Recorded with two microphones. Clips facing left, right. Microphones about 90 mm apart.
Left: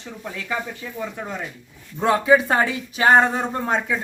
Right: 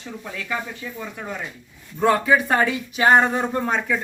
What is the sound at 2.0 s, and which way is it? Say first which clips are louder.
Speech: left 1 dB; 20° left (ahead or behind).